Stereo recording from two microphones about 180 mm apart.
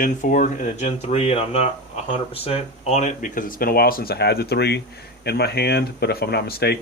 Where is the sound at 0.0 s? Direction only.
45° left (ahead or behind).